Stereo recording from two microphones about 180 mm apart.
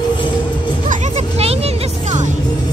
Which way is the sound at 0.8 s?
35° right (ahead or behind).